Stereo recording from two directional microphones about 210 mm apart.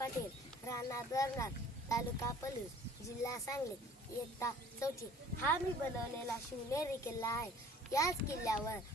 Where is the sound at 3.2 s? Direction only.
15° left (ahead or behind).